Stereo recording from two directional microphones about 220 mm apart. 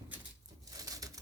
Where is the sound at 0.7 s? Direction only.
15° right (ahead or behind).